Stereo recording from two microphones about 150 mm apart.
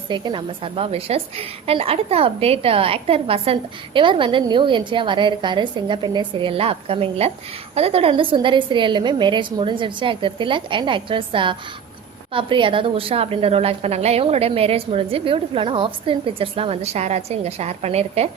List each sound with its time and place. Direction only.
0.1 s a woman's voice: 35° right (ahead or behind)